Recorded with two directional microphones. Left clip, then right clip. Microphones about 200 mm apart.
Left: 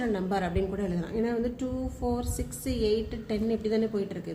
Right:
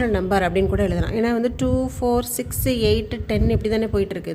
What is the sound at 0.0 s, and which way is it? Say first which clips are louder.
A woman's voice: right 10 dB; 45° right (ahead or behind).